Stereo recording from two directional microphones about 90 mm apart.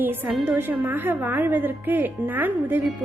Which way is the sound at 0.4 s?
25° right (ahead or behind).